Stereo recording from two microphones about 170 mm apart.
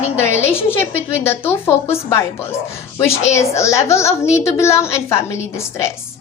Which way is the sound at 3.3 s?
15° left (ahead or behind).